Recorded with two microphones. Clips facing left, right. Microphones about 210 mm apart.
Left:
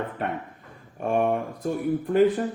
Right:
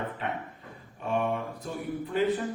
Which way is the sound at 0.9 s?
50° left (ahead or behind).